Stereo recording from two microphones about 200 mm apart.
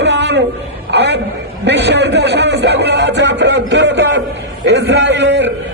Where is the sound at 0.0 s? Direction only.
60° right (ahead or behind).